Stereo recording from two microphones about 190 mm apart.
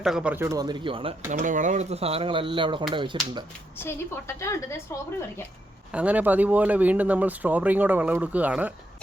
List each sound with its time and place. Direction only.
0.0 s speech: 5° right (ahead or behind); by 1.1 s 25° right (ahead or behind)
1.3 s speech: 40° right (ahead or behind); by 3.4 s 25° right (ahead or behind)
3.8 s a woman's voice: 15° left (ahead or behind)
5.9 s speech: 5° right (ahead or behind)